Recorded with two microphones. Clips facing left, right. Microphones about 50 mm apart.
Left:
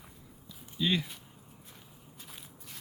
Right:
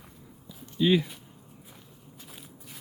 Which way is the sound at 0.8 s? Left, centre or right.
Centre.